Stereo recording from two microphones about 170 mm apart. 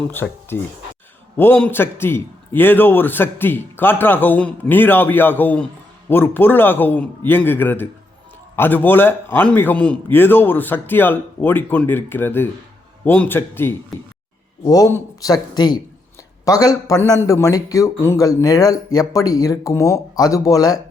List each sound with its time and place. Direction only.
0.1 s a man's voice: 15° left (ahead or behind)